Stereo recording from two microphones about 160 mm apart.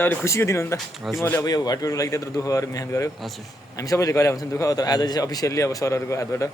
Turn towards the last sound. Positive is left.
turn(degrees=20)  # may be behind; listen again after turning